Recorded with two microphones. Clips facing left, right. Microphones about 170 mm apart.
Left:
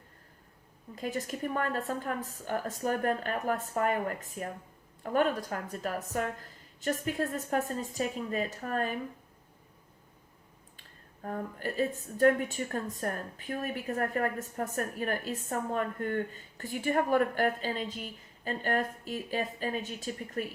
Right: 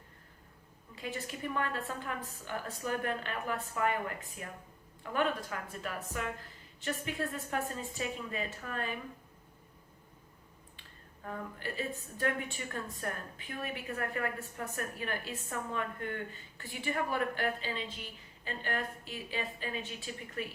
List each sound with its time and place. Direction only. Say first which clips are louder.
0.9 s a woman's voice: left 6 dB; 40° left (ahead or behind)
10.8 s a woman's voice: left 6 dB; 40° left (ahead or behind)